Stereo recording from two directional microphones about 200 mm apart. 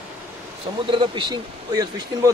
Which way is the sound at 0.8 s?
25° right (ahead or behind).